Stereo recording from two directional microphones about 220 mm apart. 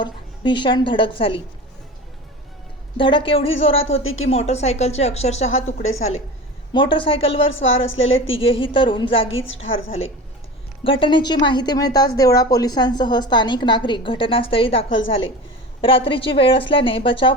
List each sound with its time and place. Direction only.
0.0 s a woman's voice: 20° left (ahead or behind)
3.0 s a woman's voice: 20° left (ahead or behind)
4.0 s a woman's voice: 65° left (ahead or behind)
4.3 s a woman's voice: 30° left (ahead or behind)
6.7 s a woman's voice: 20° left (ahead or behind)
7.3 s a woman's voice: 60° left (ahead or behind)
8.4 s a woman's voice: 25° left (ahead or behind)
9.3 s a woman's voice: 60° left (ahead or behind)
10.8 s a woman's voice: 25° left (ahead or behind)